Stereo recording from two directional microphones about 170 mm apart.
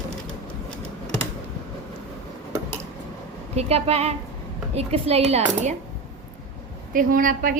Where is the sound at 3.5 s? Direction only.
40° right (ahead or behind).